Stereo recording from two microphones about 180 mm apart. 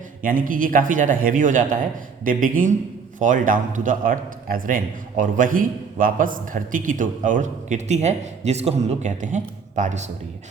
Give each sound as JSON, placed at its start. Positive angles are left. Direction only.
{"t": 0.2, "sound": "a man's voice", "side_deg": -50}